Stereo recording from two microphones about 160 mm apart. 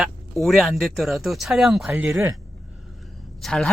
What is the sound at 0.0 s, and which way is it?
Speech, centre (ahead or behind).